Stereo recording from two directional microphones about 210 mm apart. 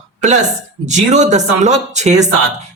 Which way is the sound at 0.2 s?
35° right (ahead or behind).